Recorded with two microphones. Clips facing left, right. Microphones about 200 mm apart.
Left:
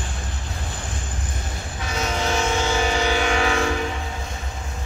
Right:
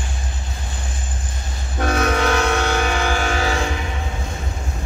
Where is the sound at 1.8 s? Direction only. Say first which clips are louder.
Right 7 dB; 60° right (ahead or behind); by 3.6 s 40° right (ahead or behind).